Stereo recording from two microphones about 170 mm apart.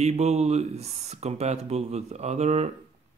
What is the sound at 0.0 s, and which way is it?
Speech, 40° right (ahead or behind).